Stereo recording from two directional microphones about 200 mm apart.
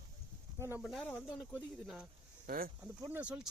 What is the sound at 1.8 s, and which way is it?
Speech, 5° right (ahead or behind).